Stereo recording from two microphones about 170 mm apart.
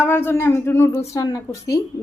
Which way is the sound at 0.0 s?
15° left (ahead or behind).